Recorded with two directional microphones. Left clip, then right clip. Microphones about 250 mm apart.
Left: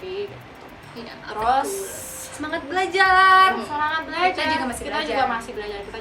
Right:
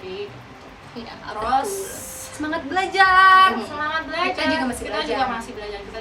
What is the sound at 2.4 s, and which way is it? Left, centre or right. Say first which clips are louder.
A woman's voice: right 1 dB; centre.